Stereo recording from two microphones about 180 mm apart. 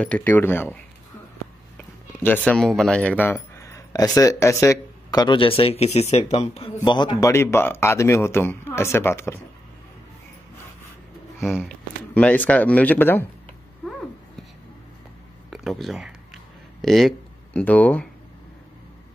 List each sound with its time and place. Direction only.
0.0 s a man's voice: 10° left (ahead or behind)
1.8 s a man's voice: 10° left (ahead or behind)
11.4 s speech: centre (ahead or behind)
15.5 s speech: centre (ahead or behind)